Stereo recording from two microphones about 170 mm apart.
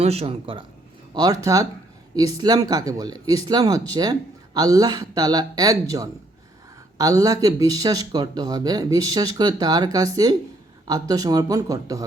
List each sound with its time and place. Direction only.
0.0 s a man's voice: 35° right (ahead or behind)
1.1 s speech: 20° right (ahead or behind)